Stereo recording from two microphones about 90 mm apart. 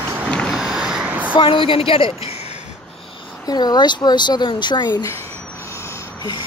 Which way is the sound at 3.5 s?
50° left (ahead or behind).